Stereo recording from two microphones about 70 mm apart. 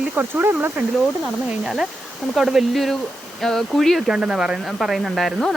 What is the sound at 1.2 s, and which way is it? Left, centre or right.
Speech, centre.